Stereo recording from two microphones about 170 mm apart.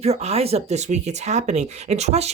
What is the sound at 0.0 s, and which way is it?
Speech, 40° right (ahead or behind).